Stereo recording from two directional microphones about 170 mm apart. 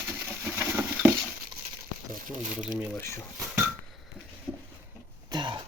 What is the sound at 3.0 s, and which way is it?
Speech, 15° left (ahead or behind).